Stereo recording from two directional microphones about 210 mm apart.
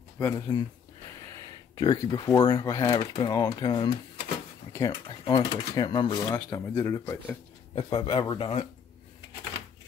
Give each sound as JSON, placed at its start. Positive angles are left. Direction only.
{"t": 0.5, "sound": "speech", "side_deg": 20}
{"t": 7.7, "sound": "speech", "side_deg": 25}